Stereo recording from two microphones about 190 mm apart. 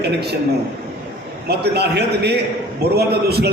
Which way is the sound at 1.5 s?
60° right (ahead or behind).